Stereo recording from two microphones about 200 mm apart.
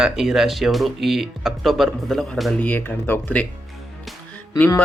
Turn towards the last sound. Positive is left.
turn(degrees=10)  # may be behind; listen again after turning